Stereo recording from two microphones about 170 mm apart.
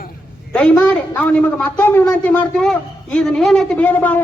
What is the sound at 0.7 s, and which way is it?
A woman's voice, 10° left (ahead or behind).